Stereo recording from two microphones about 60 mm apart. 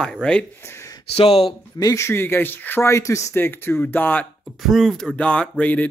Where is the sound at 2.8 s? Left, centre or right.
Left.